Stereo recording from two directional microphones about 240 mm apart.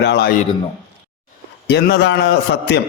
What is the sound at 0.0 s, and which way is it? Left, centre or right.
Speech, left.